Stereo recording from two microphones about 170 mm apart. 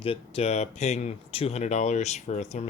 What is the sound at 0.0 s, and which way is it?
Speech, 35° left (ahead or behind).